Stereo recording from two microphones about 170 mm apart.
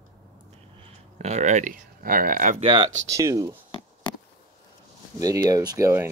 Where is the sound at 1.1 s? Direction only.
40° right (ahead or behind).